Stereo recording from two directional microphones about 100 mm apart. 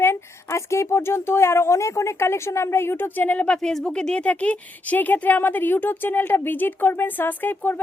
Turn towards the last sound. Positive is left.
turn(degrees=20)  # may be behind; listen again after turning